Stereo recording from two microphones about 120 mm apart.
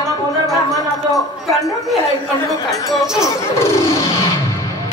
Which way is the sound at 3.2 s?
25° left (ahead or behind).